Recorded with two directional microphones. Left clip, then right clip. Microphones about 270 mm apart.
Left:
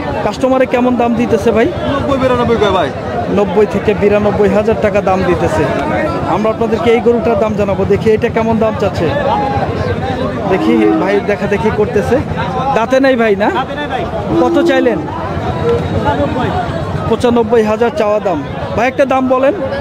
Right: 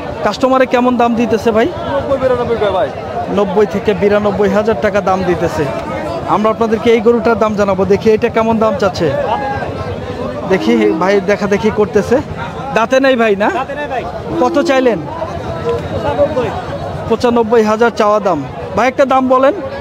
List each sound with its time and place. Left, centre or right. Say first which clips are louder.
0.4 s a man's voice: right 1 dB; centre
2.2 s a man's voice: left 4 dB; left
3.3 s a man's voice: left 1 dB; centre
6.3 s a man's voice: right 3 dB; right
10.5 s a man's voice: left 1 dB; right
17.1 s a man's voice: even; centre